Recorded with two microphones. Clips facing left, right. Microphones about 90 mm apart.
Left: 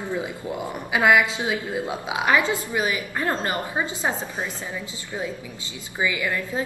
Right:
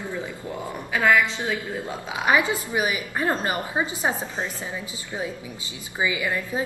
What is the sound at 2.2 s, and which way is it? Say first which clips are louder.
A woman's voice: even; 20° right (ahead or behind).